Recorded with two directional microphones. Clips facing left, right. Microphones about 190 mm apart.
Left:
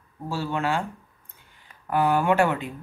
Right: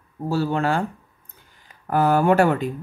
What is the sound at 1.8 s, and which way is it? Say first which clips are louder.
Speech: right 4 dB; 40° right (ahead or behind).